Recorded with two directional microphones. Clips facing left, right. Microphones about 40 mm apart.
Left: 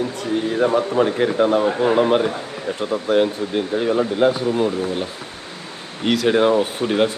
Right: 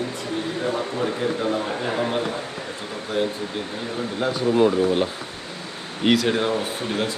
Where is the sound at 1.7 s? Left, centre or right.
Centre.